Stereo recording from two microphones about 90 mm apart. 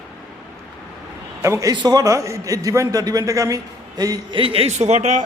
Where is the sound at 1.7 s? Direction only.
50° right (ahead or behind).